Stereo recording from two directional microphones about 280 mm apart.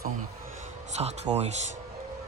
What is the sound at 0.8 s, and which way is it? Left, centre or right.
Speech, right.